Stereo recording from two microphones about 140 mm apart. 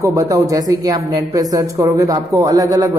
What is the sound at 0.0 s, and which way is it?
Speech, 25° right (ahead or behind).